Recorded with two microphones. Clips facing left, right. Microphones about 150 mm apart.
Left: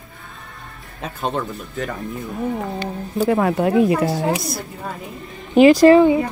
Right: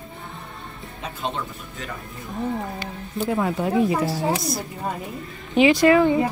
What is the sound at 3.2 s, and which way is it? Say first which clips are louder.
Speech: left 6 dB; 70° left (ahead or behind).